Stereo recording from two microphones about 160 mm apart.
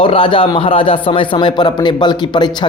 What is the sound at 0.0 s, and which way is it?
Speech, 35° left (ahead or behind).